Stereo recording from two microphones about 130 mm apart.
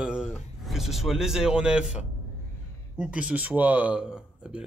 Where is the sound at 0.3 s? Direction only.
Centre (ahead or behind).